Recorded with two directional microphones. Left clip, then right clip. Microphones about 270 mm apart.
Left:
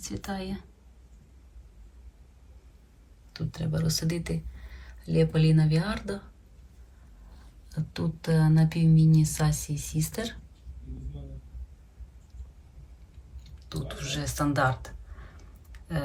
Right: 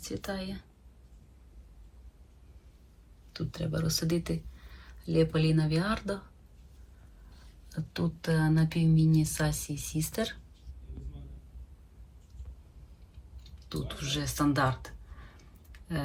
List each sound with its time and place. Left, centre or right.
0.0 s speech: centre
3.3 s speech: centre
8.2 s speech: centre
13.4 s speech: centre
15.7 s a sound: centre